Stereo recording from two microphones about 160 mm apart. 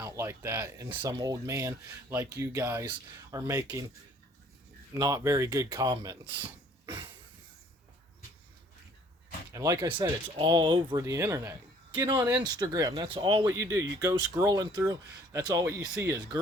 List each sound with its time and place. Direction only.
0.0 s speech: 15° right (ahead or behind)
4.9 s speech: 25° right (ahead or behind)
6.8 s a sound: 30° right (ahead or behind)
9.5 s speech: 20° right (ahead or behind)
11.0 s speech: 20° right (ahead or behind)
11.9 s speech: 30° right (ahead or behind)
12.1 s speech: 10° right (ahead or behind)
12.4 s speech: 25° right (ahead or behind)